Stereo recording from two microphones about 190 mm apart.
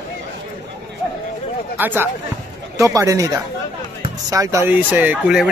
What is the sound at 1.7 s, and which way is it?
Speech, 10° right (ahead or behind).